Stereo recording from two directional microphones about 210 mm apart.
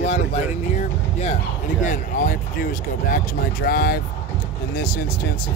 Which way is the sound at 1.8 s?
40° left (ahead or behind).